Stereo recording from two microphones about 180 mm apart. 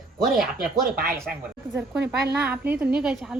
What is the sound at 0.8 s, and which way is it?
Speech, 60° right (ahead or behind).